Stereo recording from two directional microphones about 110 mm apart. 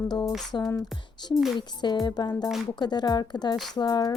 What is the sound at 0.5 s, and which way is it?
A woman's voice, 45° left (ahead or behind).